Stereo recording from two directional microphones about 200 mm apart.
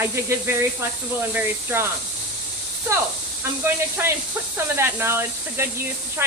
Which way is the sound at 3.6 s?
10° right (ahead or behind).